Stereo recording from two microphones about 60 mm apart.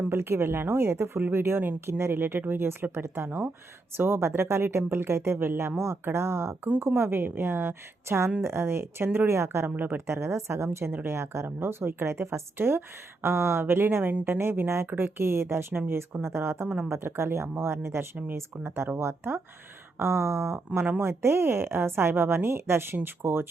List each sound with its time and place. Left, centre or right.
0.1 s a woman's voice: right
9.6 s a woman's voice: right
10.1 s a woman's voice: right
16.6 s speech: centre
16.9 s a woman's voice: right